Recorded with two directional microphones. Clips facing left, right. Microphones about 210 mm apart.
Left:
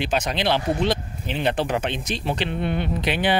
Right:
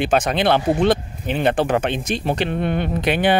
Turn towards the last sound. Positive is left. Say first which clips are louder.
# right 4 dB
turn(degrees=-50)  # may be behind; listen again after turning